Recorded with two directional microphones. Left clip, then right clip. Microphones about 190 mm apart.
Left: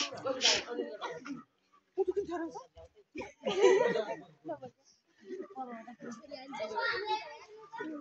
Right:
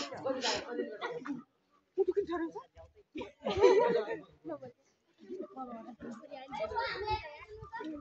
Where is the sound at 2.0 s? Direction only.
55° left (ahead or behind).